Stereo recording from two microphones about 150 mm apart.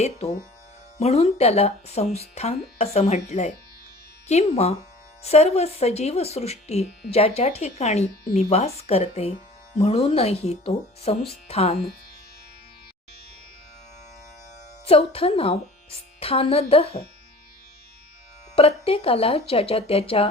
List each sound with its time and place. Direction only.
0.0 s speech: 45° left (ahead or behind)
14.8 s speech: 40° left (ahead or behind)
18.5 s speech: 40° left (ahead or behind)